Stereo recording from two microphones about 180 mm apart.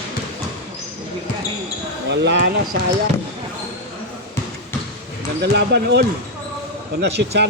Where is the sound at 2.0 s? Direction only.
70° right (ahead or behind).